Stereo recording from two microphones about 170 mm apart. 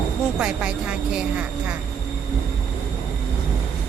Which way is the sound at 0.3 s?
5° right (ahead or behind).